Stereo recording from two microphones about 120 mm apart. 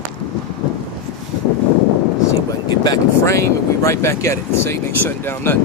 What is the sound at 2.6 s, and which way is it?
Speech, 35° left (ahead or behind).